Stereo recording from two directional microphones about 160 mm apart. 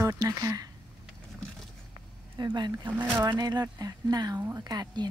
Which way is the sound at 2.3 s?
25° right (ahead or behind).